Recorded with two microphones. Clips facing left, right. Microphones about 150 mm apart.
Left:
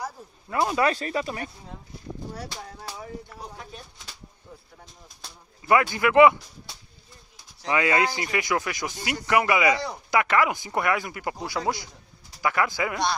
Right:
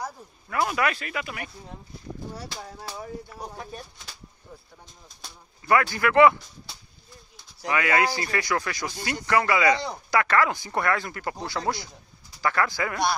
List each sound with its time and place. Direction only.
0.5 s speech: 25° left (ahead or behind)
5.7 s a man's voice: 20° left (ahead or behind)
7.6 s speech: 25° left (ahead or behind)